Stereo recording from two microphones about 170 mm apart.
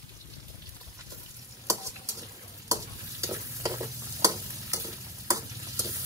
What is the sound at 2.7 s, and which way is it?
Stir, 20° right (ahead or behind).